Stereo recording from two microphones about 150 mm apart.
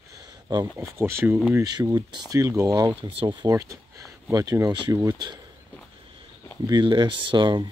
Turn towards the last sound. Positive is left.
turn(degrees=-30)  # may be behind; listen again after turning